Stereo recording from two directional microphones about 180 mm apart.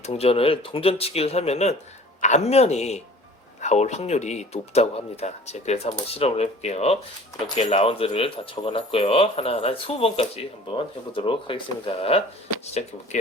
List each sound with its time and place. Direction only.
0.0 s speech: 35° left (ahead or behind)